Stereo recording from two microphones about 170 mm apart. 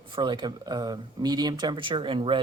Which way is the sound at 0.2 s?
25° right (ahead or behind).